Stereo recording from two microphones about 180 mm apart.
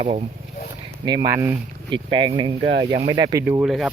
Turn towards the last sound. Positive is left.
turn(degrees=0)  # may be behind; listen again after turning